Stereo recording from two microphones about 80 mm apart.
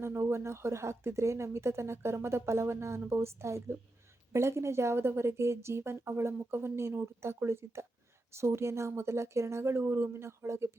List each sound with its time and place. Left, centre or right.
0.0 s speech: right